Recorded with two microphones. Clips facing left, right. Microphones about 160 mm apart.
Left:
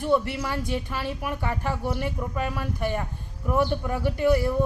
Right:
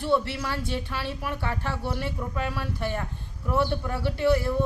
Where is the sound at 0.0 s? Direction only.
15° left (ahead or behind).